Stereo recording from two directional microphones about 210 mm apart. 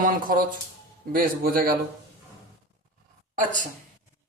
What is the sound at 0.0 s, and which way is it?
A man's voice, 40° right (ahead or behind).